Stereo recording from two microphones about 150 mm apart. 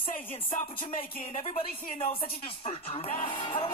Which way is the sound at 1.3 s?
45° left (ahead or behind).